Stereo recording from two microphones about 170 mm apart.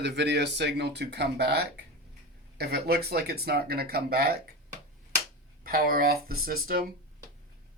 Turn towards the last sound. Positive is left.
turn(degrees=-60)  # may be behind; listen again after turning